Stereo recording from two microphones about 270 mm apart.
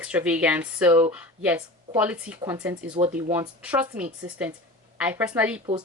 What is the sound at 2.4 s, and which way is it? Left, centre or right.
Speech, centre.